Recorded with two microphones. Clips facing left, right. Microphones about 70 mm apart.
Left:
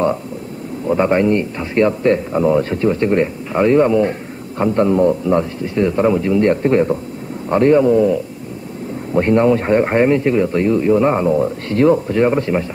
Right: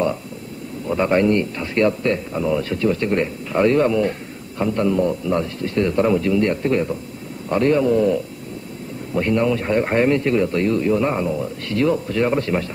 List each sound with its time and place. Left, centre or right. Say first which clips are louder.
0.8 s a man's voice: left 3 dB; centre
9.1 s a man's voice: left 6 dB; left